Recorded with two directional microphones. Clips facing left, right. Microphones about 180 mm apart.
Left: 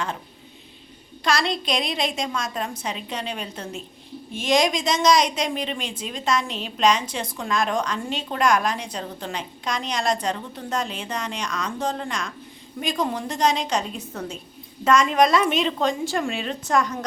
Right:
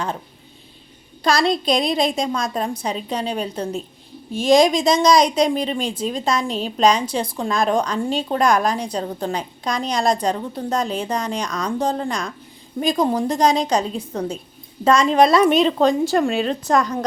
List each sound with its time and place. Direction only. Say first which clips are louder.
1.2 s a woman's voice: right 5 dB; 35° right (ahead or behind)